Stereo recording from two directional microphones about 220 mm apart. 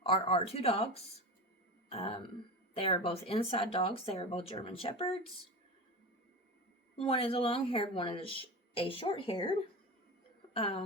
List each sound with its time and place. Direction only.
0.0 s speech: 25° left (ahead or behind)
6.9 s speech: 25° left (ahead or behind)